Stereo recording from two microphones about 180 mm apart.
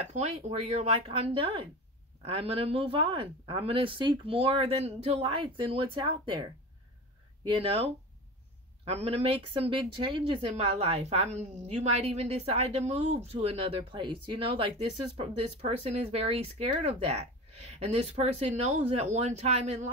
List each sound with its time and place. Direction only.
0.1 s a woman's voice: 40° right (ahead or behind)